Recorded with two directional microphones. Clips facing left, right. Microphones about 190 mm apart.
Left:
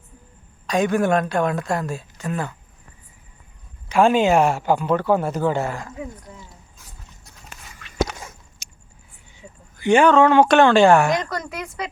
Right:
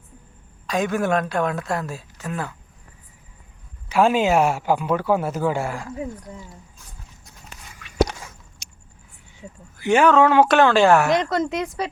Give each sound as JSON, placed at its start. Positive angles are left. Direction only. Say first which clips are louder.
{"t": 0.7, "sound": "a woman's voice", "louder": "left 3 dB", "side_deg": 0}
{"t": 3.8, "sound": "speech", "louder": "left 2 dB", "side_deg": -5}
{"t": 7.8, "sound": "walk", "louder": "right 3 dB", "side_deg": -10}
{"t": 8.6, "sound": "a sound", "louder": "even", "side_deg": 5}
{"t": 9.7, "sound": "a woman's voice", "louder": "left 1 dB", "side_deg": -5}
{"t": 11.2, "sound": "speech", "louder": "right 6 dB", "side_deg": -25}